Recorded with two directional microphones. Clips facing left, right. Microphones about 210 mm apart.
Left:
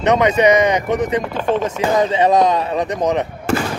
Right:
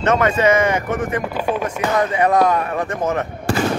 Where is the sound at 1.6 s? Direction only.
20° left (ahead or behind).